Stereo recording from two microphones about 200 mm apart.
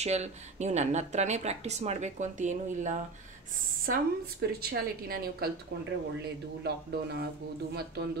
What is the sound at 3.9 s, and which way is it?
A woman's voice, 50° right (ahead or behind).